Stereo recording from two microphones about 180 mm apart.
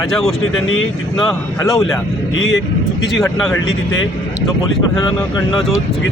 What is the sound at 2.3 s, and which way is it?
Speech, 90° left.